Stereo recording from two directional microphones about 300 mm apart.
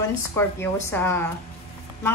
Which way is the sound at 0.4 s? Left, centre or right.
Centre.